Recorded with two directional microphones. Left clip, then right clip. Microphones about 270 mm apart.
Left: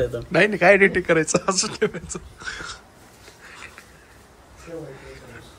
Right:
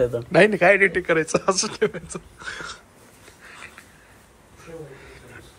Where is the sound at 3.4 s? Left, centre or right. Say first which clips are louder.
Even; centre.